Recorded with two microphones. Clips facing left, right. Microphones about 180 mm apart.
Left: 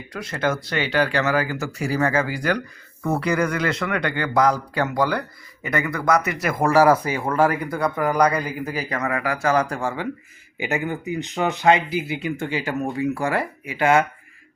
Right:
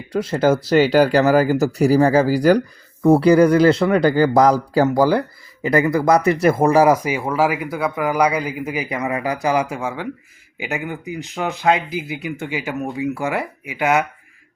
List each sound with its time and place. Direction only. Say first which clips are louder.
0.1 s speech: right 8 dB; 30° right (ahead or behind); by 13.1 s 5° right (ahead or behind)
13.1 s speech: right 1 dB; 15° right (ahead or behind)